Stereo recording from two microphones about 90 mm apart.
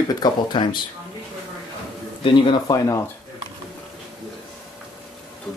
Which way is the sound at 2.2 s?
70° left (ahead or behind).